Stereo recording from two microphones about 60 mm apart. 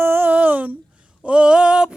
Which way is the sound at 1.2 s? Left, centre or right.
Centre.